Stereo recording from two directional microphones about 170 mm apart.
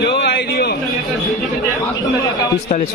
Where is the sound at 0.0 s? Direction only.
90° left; by 0.8 s 70° left (ahead or behind).